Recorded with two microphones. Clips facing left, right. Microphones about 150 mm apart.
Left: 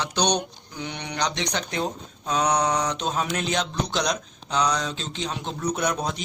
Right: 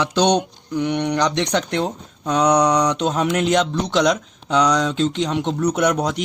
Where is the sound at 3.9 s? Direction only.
90° right.